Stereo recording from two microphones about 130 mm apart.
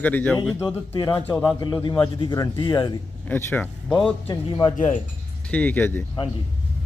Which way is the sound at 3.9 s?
Centre (ahead or behind).